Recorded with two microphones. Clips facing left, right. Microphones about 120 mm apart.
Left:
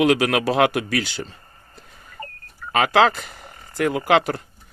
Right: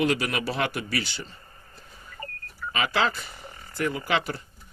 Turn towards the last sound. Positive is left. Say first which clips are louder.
# left 9 dB
turn(degrees=55)  # may be behind; listen again after turning